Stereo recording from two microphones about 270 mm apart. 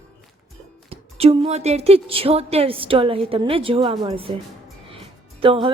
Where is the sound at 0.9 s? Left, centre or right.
Right.